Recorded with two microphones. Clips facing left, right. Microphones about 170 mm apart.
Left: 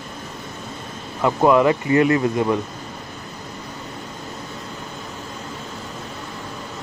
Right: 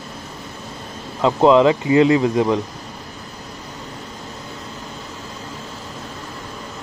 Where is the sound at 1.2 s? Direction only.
15° right (ahead or behind).